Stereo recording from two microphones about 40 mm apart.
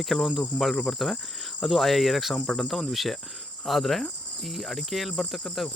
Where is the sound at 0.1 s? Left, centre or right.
Left.